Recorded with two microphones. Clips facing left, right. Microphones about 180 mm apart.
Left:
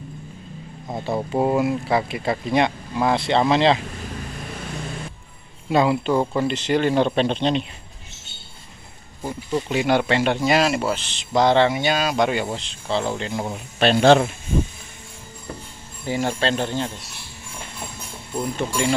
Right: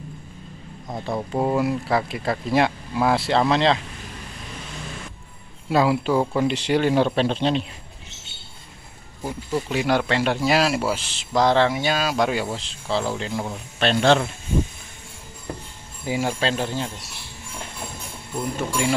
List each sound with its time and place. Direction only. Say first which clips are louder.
0.8 s speech: left 2 dB; 5° left (ahead or behind)
5.7 s speech: left 1 dB; 5° right (ahead or behind)
9.2 s speech: left 1 dB; centre (ahead or behind)
13.5 s a man's voice: left 5 dB; 10° left (ahead or behind)
16.1 s speech: left 1 dB; 5° right (ahead or behind)
18.3 s speech: left 1 dB; 5° right (ahead or behind)